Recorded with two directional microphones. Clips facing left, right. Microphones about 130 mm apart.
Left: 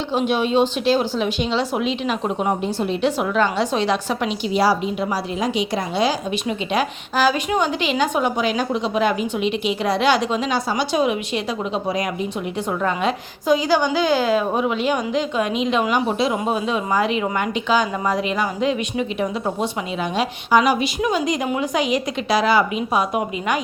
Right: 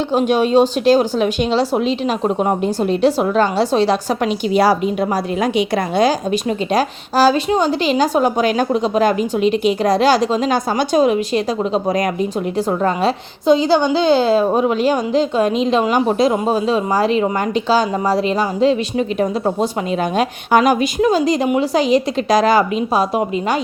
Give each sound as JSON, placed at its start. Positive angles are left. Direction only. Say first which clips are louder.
{"t": 0.1, "sound": "a woman's voice", "louder": "right 5 dB", "side_deg": -45}
{"t": 4.5, "sound": "a woman's voice", "louder": "right 4 dB", "side_deg": -55}
{"t": 21.0, "sound": "a woman's voice", "louder": "right 6 dB", "side_deg": -35}